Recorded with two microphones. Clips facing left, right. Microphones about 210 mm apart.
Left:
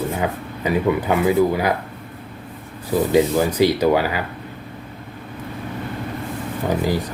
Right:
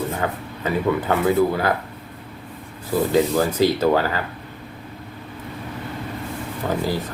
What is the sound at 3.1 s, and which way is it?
Speech, 15° left (ahead or behind).